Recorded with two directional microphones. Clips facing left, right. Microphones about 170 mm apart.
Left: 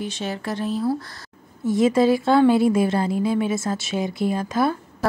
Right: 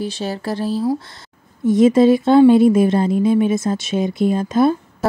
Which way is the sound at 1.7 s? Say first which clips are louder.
Right 6 dB; 20° right (ahead or behind).